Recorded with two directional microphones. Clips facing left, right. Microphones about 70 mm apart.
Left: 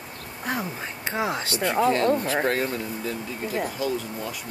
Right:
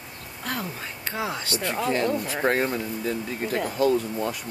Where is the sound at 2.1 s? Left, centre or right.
Left.